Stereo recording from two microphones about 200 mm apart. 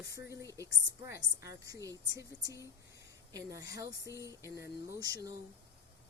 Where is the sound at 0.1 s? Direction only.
15° right (ahead or behind).